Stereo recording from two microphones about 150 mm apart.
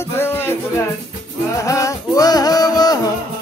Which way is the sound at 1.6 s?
20° left (ahead or behind).